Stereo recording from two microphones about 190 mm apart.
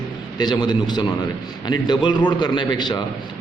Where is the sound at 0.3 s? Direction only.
20° left (ahead or behind).